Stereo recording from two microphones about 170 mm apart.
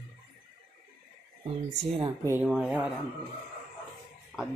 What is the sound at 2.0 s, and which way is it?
Speech, 15° right (ahead or behind).